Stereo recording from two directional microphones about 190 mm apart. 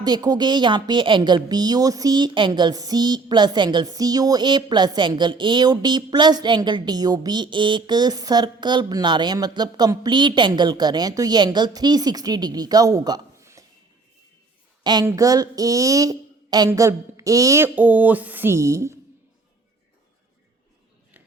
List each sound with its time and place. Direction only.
0.0 s a woman's voice: 20° right (ahead or behind)
14.8 s a woman's voice: 20° right (ahead or behind)